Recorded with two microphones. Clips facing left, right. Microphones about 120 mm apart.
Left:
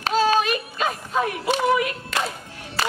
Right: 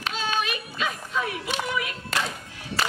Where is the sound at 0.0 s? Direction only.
40° left (ahead or behind).